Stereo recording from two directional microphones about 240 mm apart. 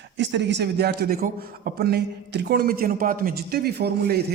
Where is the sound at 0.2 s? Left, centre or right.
Right.